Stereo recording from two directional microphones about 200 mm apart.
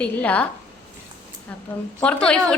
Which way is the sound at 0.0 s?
5° left (ahead or behind).